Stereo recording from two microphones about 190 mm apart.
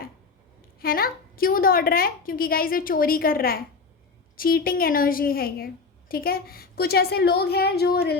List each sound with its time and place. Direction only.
0.8 s a woman's voice: 50° left (ahead or behind)